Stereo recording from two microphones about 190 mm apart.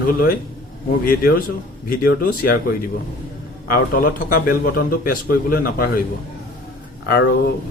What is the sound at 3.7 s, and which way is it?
Speech, 50° left (ahead or behind).